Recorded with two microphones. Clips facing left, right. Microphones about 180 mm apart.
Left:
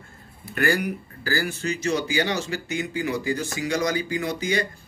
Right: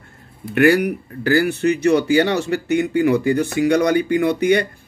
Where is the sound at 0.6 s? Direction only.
65° right (ahead or behind).